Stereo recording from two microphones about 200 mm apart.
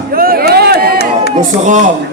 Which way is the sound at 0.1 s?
45° right (ahead or behind).